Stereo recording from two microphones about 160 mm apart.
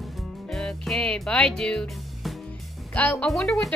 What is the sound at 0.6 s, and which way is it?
Music, 5° left (ahead or behind).